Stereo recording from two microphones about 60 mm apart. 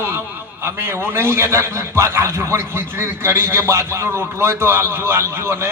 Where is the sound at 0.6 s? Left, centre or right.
Right.